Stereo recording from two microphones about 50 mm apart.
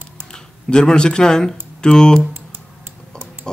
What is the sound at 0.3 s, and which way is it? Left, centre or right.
Speech, centre.